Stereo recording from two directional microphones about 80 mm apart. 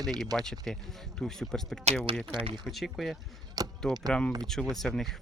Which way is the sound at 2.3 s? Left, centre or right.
Right.